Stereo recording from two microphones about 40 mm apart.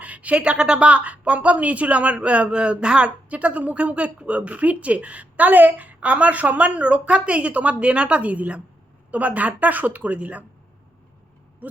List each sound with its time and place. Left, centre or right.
0.0 s a woman's voice: right
3.2 s a woman's voice: right
11.6 s a sound: right